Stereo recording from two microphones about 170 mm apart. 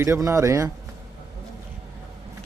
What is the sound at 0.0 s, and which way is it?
Speech, 15° right (ahead or behind).